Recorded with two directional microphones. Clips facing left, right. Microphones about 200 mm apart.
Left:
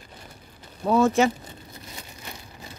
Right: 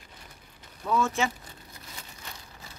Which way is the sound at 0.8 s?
40° left (ahead or behind).